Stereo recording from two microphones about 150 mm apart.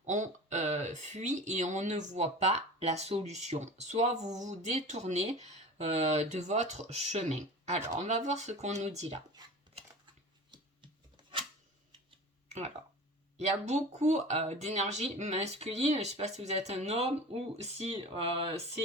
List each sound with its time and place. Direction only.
0.0 s speech: 55° right (ahead or behind)
11.2 s a sound: 30° right (ahead or behind)
13.3 s speech: 50° right (ahead or behind)